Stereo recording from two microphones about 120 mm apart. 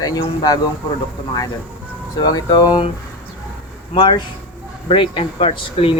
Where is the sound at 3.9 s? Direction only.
45° left (ahead or behind).